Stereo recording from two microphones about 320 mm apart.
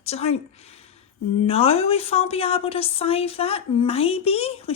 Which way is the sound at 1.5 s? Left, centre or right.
Centre.